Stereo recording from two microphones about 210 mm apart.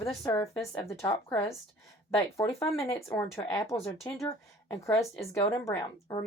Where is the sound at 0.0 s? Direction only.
15° left (ahead or behind).